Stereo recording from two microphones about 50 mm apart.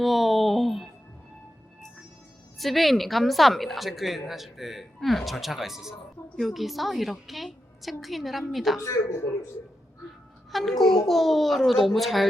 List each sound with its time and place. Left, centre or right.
0.0 s a sound: centre
2.6 s a woman's voice: centre
8.8 s speech: left
10.5 s a woman's voice: centre